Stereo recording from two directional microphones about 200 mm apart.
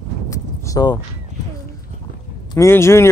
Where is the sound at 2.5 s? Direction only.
15° left (ahead or behind).